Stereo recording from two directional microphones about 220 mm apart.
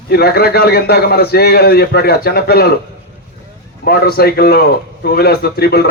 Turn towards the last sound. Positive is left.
turn(degrees=45)  # may be behind; listen again after turning